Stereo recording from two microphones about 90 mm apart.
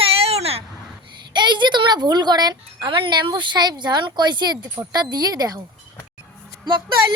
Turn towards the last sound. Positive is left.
turn(degrees=-55)  # may be behind; listen again after turning